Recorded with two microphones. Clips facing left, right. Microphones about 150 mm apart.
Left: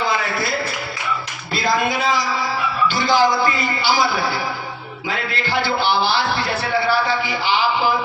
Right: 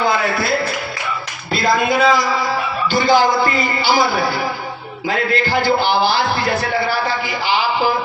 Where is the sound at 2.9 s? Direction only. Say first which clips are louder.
Right 4 dB; 50° right (ahead or behind).